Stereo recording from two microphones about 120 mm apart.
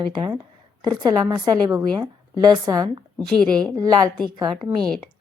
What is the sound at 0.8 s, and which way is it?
A woman's voice, 35° right (ahead or behind).